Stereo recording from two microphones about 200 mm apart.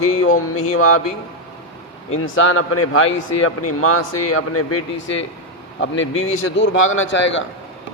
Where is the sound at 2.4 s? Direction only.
90° left.